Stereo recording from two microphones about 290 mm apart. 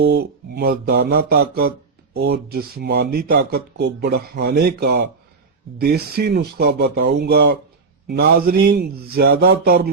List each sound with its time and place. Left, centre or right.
0.0 s speech: right